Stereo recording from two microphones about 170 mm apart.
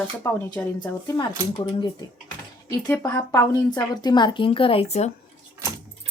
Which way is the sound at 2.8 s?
10° left (ahead or behind).